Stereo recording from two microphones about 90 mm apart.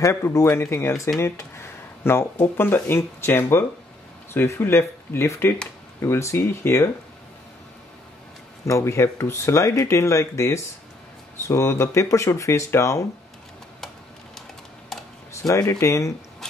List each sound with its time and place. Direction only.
0.0 s speech: 30° left (ahead or behind)
8.6 s speech: 30° left (ahead or behind)
15.4 s speech: 40° left (ahead or behind)